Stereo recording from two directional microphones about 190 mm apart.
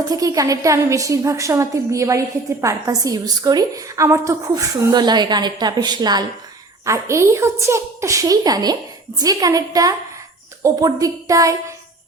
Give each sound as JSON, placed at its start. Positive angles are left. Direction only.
{"t": 0.1, "sound": "a woman's voice", "side_deg": -20}